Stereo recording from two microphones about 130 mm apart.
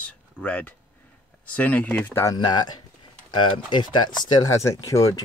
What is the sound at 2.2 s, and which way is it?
Speech, 30° left (ahead or behind).